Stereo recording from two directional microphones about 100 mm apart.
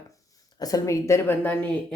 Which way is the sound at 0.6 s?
35° left (ahead or behind).